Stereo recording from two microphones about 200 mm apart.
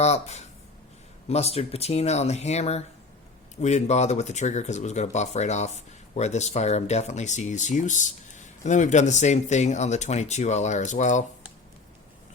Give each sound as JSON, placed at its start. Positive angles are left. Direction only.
{"t": 0.0, "sound": "speech", "side_deg": 35}